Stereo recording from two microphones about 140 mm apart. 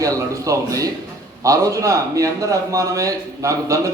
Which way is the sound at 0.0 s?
25° right (ahead or behind).